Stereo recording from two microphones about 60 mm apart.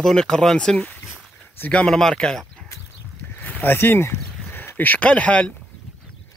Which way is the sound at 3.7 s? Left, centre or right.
Left.